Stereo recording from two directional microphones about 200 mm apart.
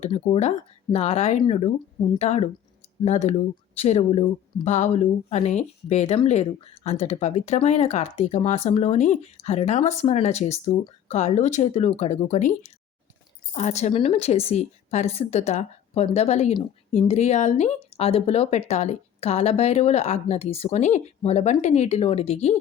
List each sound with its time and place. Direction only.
0.0 s a woman's voice: 35° left (ahead or behind)